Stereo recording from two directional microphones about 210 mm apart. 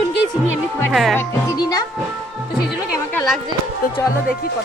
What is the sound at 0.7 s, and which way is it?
Speech, 5° left (ahead or behind).